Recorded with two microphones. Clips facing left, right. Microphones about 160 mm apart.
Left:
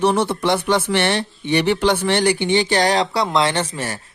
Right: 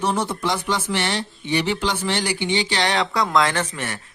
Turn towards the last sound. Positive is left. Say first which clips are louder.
# left 3 dB
turn(degrees=35)  # may be behind; listen again after turning